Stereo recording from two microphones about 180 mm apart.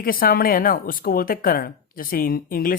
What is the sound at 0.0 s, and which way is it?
Speech, 55° left (ahead or behind).